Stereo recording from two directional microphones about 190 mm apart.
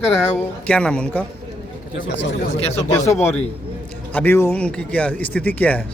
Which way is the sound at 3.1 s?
10° left (ahead or behind).